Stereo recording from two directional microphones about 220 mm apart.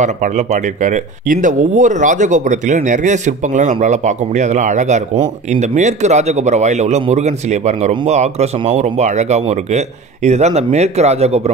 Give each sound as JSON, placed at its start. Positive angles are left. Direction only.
{"t": 0.0, "sound": "speech", "side_deg": -35}